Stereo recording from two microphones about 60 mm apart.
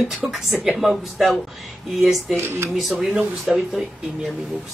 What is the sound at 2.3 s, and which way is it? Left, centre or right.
Speech, right.